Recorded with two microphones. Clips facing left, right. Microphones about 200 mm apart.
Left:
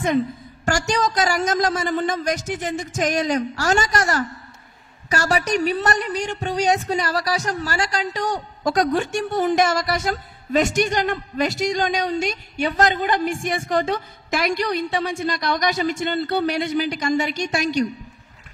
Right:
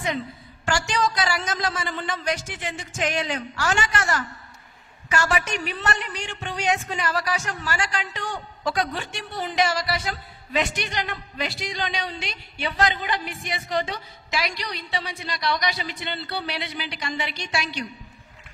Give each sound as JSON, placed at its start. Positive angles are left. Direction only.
{"t": 0.7, "sound": "speech", "side_deg": 40}